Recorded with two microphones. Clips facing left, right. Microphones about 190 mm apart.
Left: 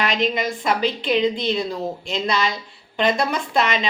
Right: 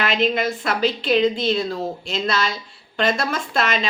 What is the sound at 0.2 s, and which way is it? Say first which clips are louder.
A woman's voice: right 2 dB; 15° left (ahead or behind).